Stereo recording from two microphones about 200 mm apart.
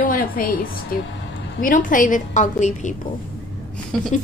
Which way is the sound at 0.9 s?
45° left (ahead or behind).